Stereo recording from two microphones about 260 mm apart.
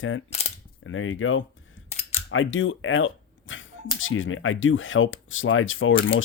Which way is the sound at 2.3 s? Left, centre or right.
Left.